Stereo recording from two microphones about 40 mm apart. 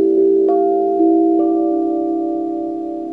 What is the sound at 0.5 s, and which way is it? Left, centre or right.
Tubular bells, centre.